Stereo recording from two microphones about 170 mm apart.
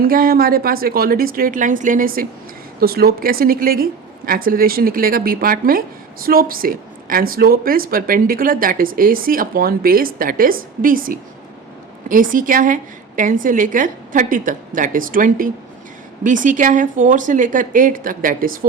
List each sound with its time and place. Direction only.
0.0 s a woman's voice: 60° right (ahead or behind)